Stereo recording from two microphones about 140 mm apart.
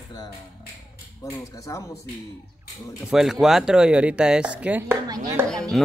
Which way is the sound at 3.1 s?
5° right (ahead or behind).